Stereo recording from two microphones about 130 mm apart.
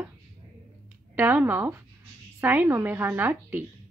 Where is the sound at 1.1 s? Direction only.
15° right (ahead or behind).